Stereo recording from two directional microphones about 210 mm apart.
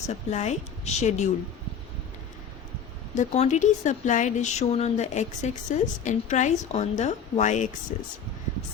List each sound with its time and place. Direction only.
0.1 s speech: 35° left (ahead or behind)
3.2 s speech: 35° left (ahead or behind)